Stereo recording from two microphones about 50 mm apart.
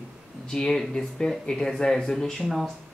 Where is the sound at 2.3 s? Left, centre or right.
Centre.